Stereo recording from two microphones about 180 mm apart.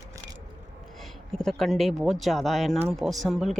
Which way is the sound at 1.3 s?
Centre (ahead or behind).